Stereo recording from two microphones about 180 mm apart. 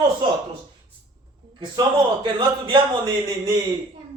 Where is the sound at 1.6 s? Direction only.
25° right (ahead or behind).